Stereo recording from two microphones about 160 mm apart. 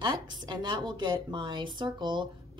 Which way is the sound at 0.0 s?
25° right (ahead or behind).